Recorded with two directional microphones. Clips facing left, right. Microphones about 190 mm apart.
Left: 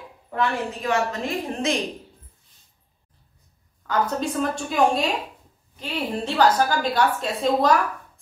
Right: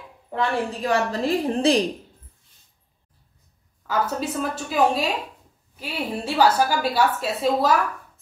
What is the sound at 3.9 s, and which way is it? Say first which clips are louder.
A woman's voice: left 1 dB; 5° right (ahead or behind).